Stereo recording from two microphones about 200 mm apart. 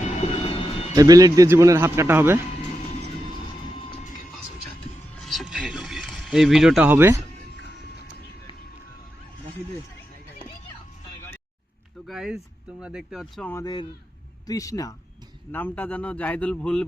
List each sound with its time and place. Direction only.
0.0 s vehicle: 30° left (ahead or behind)
0.9 s speech: 20° right (ahead or behind)
5.2 s a sound: centre (ahead or behind)
12.0 s a man's voice: centre (ahead or behind)